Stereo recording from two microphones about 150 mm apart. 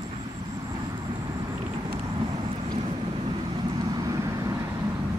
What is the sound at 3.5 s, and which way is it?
Vehicle, 25° right (ahead or behind).